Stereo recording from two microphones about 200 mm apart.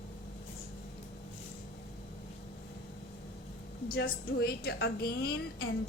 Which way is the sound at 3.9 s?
50° left (ahead or behind).